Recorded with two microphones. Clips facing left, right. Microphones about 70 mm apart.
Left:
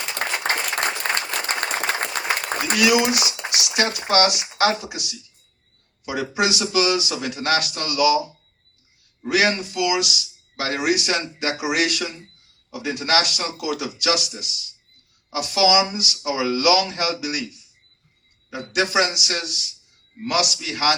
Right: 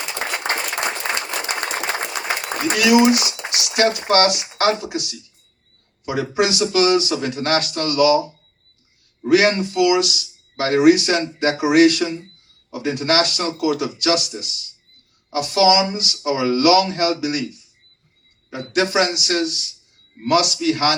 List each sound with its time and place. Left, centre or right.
0.3 s applause: right
1.1 s applause: left
2.7 s speech: right
6.1 s speech: right
9.4 s speech: right